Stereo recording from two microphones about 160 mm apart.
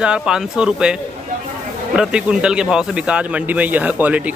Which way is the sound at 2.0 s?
5° right (ahead or behind).